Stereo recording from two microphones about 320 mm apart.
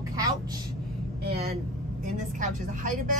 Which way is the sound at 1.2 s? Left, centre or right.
Centre.